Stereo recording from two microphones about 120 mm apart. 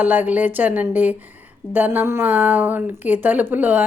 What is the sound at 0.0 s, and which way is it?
Speech, 15° right (ahead or behind).